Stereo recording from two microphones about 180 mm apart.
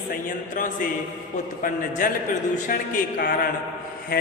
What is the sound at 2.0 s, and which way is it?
Mantra, 50° left (ahead or behind).